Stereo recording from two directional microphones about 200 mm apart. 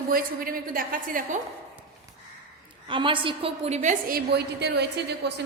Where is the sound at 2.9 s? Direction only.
25° right (ahead or behind); by 5.4 s 55° right (ahead or behind).